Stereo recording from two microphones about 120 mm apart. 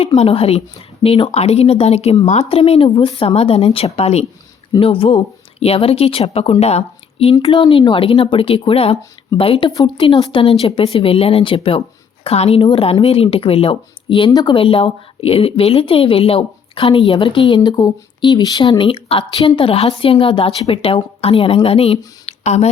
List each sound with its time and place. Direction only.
0.2 s speech: 55° left (ahead or behind)
4.8 s speech: 45° left (ahead or behind)
7.4 s speech: 45° left (ahead or behind)
14.3 s speech: 30° left (ahead or behind)
14.5 s speech: 50° left (ahead or behind)